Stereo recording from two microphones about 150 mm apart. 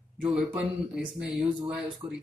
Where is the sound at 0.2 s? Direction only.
5° right (ahead or behind).